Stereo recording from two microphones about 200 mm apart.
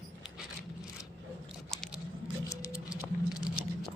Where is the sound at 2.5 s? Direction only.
15° left (ahead or behind).